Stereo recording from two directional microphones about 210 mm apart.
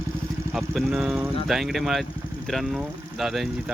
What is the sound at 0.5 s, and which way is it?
Speech, centre (ahead or behind).